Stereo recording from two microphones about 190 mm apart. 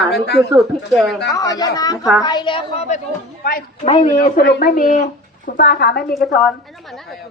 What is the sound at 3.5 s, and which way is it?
Speech, 50° left (ahead or behind).